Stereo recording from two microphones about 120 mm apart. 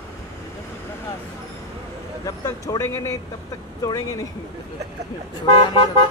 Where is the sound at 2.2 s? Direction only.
30° left (ahead or behind).